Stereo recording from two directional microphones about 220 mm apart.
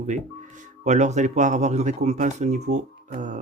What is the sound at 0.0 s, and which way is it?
Speech, 35° right (ahead or behind).